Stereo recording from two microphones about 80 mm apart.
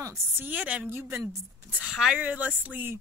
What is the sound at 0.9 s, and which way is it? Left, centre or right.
Speech, right.